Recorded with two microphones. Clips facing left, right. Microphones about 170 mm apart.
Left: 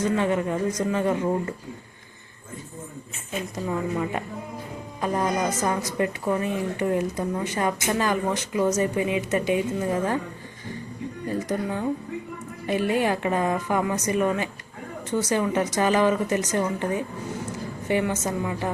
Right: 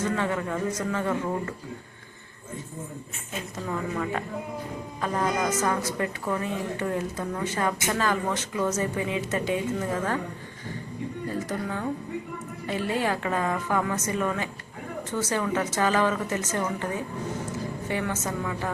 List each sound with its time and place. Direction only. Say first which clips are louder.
0.2 s a man's voice: left 4 dB; 20° left (ahead or behind)
3.7 s a woman's voice: left 2 dB; 15° left (ahead or behind)
11.4 s a woman's voice: left 4 dB; 15° left (ahead or behind)
17.8 s a woman's voice: left 7 dB; 15° left (ahead or behind)